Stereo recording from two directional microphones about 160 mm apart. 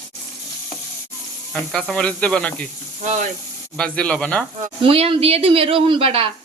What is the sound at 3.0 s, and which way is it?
Speech, 50° right (ahead or behind).